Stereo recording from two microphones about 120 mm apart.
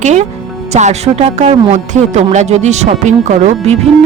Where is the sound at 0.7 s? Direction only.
70° right (ahead or behind).